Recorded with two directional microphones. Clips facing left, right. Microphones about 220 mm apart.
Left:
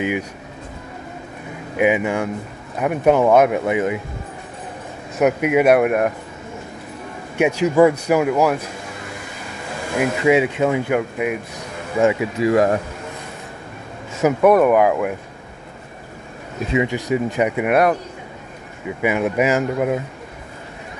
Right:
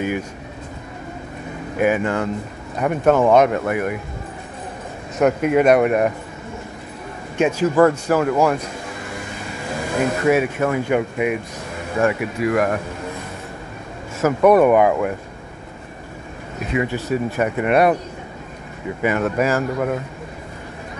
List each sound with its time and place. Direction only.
1.8 s speech: 15° left (ahead or behind)
5.2 s speech: 10° left (ahead or behind)
7.3 s speech: 10° left (ahead or behind)
9.9 s speech: 15° left (ahead or behind)
10.9 s speech: centre (ahead or behind)
12.0 s speech: 20° left (ahead or behind)
14.4 s speech: centre (ahead or behind)
16.7 s speech: 15° left (ahead or behind)
18.9 s speech: 10° left (ahead or behind)